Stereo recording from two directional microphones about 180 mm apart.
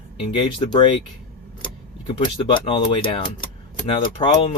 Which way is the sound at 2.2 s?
25° left (ahead or behind).